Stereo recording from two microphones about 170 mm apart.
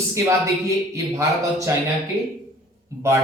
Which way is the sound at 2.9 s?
15° right (ahead or behind).